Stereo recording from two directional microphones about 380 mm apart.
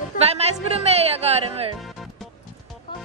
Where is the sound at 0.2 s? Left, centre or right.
Centre.